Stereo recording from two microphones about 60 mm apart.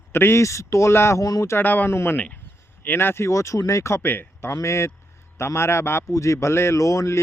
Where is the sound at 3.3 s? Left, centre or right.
Left.